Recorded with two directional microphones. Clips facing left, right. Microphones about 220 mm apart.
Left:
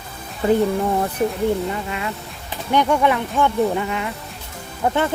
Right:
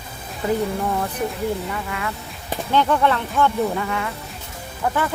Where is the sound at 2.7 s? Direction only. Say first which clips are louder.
Left 2 dB; 15° left (ahead or behind).